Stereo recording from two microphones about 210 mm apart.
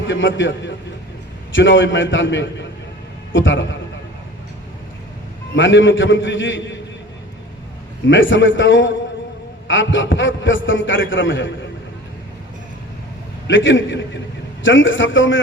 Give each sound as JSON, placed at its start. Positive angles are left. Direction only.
{"t": 0.1, "sound": "a man's voice", "side_deg": 65}
{"t": 5.5, "sound": "a man's voice", "side_deg": 65}
{"t": 8.0, "sound": "a man's voice", "side_deg": 65}
{"t": 13.5, "sound": "a man's voice", "side_deg": 65}